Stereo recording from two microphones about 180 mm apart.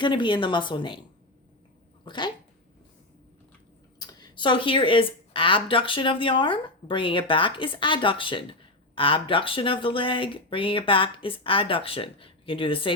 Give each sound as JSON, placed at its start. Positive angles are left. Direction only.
{"t": 0.0, "sound": "speech", "side_deg": 25}
{"t": 2.0, "sound": "speech", "side_deg": 25}
{"t": 4.0, "sound": "speech", "side_deg": 25}